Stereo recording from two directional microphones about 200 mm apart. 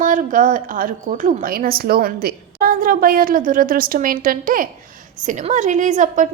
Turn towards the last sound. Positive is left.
turn(degrees=-40)  # may be behind; listen again after turning